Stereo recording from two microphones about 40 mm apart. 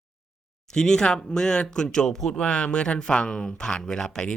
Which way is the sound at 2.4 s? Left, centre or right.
Left.